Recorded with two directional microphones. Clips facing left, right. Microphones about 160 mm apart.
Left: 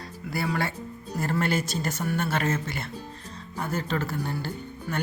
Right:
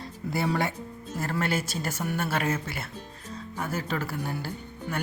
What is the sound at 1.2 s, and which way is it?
Speech, centre (ahead or behind).